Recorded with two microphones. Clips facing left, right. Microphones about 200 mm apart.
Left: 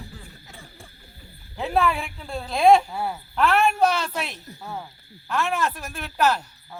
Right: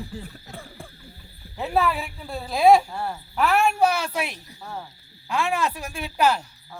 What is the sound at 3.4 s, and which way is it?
A man's voice, 10° right (ahead or behind).